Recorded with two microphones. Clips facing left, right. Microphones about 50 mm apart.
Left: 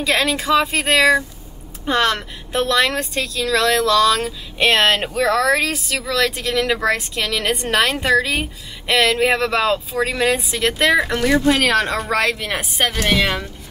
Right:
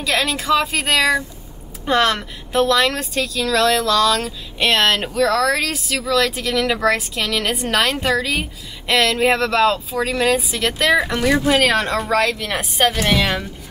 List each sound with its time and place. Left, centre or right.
0.0 s speech: centre
1.9 s a woman's voice: centre
12.1 s a woman's voice: centre